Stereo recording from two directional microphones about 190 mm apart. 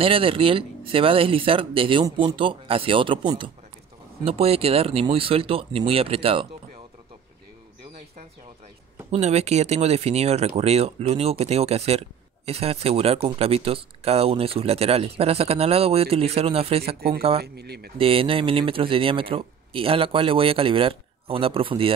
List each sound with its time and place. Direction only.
0.0 s speech: 30° right (ahead or behind)
9.1 s speech: 35° right (ahead or behind)
17.4 s speech: 55° right (ahead or behind)
17.9 s speech: 30° right (ahead or behind)